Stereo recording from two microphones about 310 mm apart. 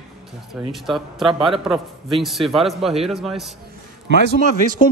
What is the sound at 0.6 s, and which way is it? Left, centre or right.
A man's voice, centre.